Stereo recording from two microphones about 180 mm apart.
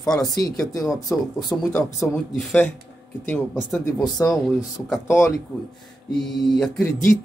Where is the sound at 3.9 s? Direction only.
20° left (ahead or behind).